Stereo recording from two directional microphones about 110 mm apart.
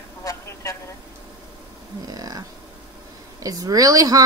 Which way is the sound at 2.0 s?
35° right (ahead or behind).